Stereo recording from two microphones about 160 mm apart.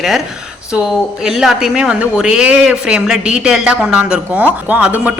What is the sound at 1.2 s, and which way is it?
A man's voice, 5° right (ahead or behind).